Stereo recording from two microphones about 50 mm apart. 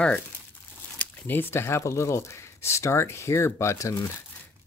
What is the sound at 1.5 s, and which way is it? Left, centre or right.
Speech, left.